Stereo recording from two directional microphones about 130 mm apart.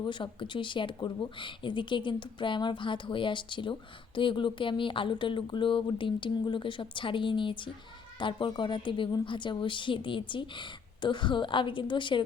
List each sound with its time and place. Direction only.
0.0 s speech: 40° left (ahead or behind)